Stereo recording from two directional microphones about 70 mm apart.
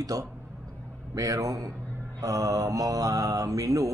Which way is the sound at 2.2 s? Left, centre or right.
Right.